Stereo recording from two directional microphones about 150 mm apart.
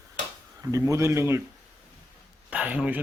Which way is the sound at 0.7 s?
20° right (ahead or behind).